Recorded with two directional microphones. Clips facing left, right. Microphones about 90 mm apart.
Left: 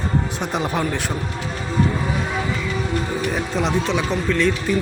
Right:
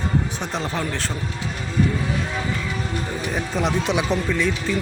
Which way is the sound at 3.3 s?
Centre (ahead or behind).